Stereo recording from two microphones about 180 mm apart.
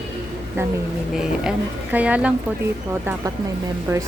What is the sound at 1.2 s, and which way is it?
Speech, 5° right (ahead or behind).